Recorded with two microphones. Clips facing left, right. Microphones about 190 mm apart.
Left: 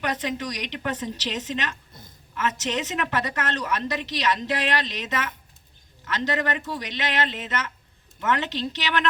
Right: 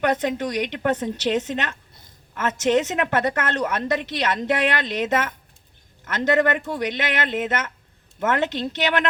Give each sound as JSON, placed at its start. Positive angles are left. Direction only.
{"t": 0.0, "sound": "a woman's voice", "side_deg": -50}